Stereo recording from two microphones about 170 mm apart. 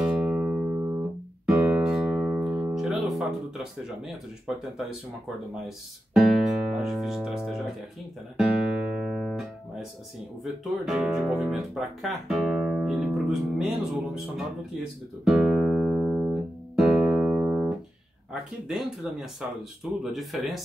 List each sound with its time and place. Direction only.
0.2 s music: 10° right (ahead or behind)
6.8 s speech: centre (ahead or behind)
8.4 s music: 5° right (ahead or behind)
10.4 s speech: 5° right (ahead or behind)